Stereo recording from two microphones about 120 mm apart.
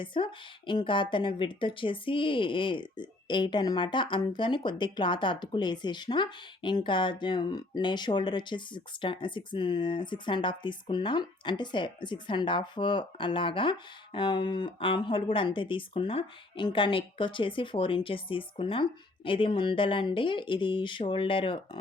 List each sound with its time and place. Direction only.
0.0 s speech: 45° left (ahead or behind)